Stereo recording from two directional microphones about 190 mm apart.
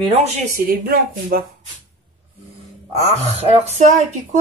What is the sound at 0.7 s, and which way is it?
Speech, 50° right (ahead or behind).